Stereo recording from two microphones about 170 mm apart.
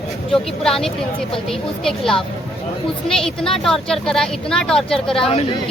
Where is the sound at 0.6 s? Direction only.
Centre (ahead or behind).